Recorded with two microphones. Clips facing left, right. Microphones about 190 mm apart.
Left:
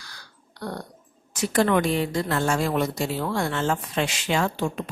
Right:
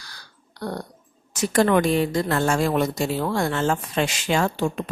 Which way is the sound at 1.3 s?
45° right (ahead or behind).